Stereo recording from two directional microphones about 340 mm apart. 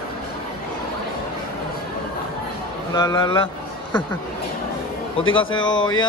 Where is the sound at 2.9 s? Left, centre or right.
Centre.